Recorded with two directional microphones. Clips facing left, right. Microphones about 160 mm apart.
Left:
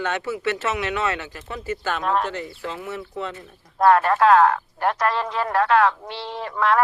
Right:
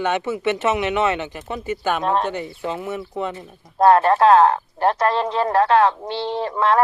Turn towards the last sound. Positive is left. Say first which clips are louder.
# right 3 dB
turn(degrees=-30)  # may be behind; listen again after turning